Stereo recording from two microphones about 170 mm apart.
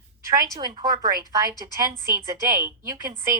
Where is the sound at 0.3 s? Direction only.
20° right (ahead or behind).